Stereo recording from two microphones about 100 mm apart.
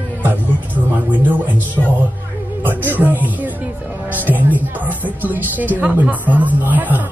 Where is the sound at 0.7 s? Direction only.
15° right (ahead or behind).